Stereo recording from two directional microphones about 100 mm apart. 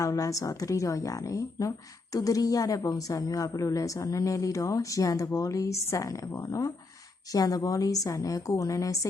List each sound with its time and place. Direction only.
0.0 s a woman's voice: 35° left (ahead or behind)